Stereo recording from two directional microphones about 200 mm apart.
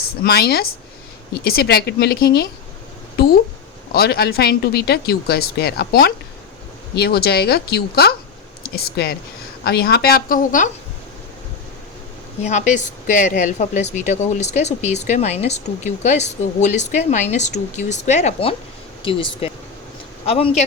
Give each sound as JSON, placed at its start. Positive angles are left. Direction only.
{"t": 0.2, "sound": "speech", "side_deg": 50}
{"t": 3.9, "sound": "speech", "side_deg": 50}
{"t": 12.4, "sound": "speech", "side_deg": 35}